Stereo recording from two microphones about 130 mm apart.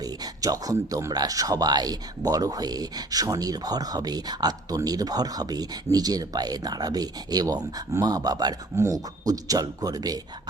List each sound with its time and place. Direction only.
0.0 s speech: 30° right (ahead or behind)